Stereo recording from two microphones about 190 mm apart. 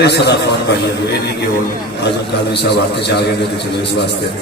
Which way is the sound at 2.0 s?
60° left (ahead or behind).